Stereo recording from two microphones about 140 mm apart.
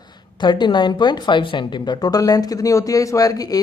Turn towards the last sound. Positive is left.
turn(degrees=25)  # may be behind; listen again after turning